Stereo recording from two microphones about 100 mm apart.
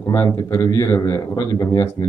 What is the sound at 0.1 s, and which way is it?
A man's voice, 35° left (ahead or behind).